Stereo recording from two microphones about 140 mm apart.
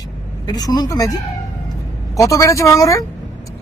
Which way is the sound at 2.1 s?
25° left (ahead or behind).